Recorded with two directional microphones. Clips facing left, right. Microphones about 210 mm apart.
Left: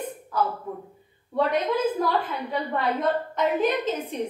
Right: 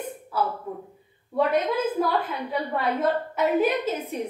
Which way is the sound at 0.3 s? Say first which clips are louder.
Left 1 dB; 10° right (ahead or behind).